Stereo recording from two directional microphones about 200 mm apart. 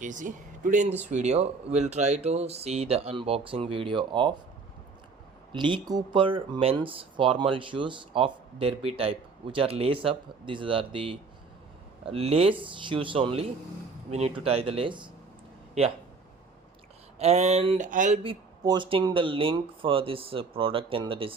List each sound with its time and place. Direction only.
0.0 s speech: 40° right (ahead or behind)
5.5 s speech: 25° right (ahead or behind)
17.2 s speech: 35° right (ahead or behind)
18.2 s speech: 25° right (ahead or behind)